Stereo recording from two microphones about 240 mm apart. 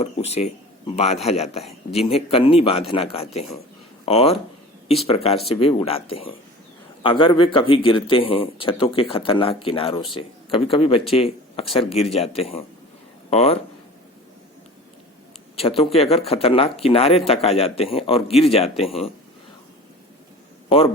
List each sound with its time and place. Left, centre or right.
0.0 s speech: left
15.5 s speech: left